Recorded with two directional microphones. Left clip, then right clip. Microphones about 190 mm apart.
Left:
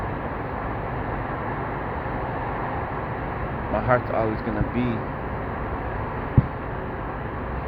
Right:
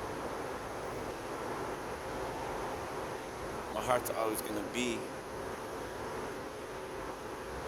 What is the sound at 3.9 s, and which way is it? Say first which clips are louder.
Speech: left 10 dB; 25° right (ahead or behind).